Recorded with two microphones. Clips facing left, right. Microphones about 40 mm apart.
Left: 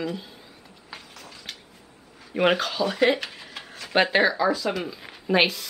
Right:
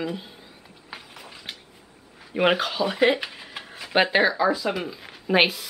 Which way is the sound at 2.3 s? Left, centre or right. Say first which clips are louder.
Even; centre.